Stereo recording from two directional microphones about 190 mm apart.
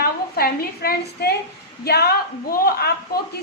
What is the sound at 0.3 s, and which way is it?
A woman's voice, 55° left (ahead or behind).